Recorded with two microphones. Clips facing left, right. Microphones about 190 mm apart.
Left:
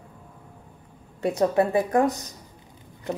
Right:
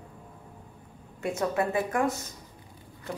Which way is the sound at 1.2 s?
35° left (ahead or behind).